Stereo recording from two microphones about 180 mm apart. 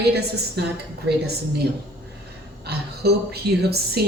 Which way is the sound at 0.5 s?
65° right (ahead or behind).